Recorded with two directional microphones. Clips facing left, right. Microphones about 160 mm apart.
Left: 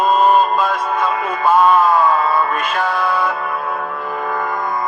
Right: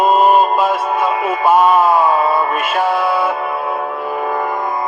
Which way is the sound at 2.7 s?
20° right (ahead or behind).